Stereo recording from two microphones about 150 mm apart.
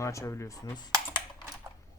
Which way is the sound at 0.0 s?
20° left (ahead or behind).